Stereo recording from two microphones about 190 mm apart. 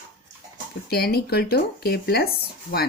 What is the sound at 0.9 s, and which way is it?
Speech, 55° left (ahead or behind).